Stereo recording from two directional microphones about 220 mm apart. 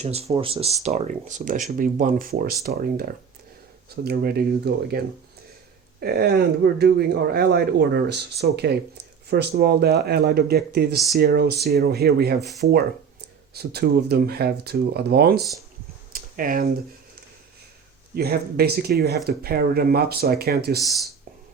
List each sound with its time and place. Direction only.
0.0 s speech: 30° right (ahead or behind); by 4.9 s 45° right (ahead or behind)
6.0 s speech: 45° right (ahead or behind)
13.5 s speech: 45° right (ahead or behind)
16.1 s computer keyboard: 40° right (ahead or behind)
18.1 s speech: 45° right (ahead or behind)